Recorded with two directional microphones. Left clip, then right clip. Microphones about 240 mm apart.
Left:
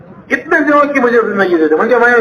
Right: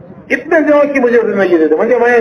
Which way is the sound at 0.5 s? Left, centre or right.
Left.